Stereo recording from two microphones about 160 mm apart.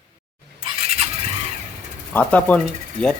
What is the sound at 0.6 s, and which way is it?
Squeal, 40° right (ahead or behind).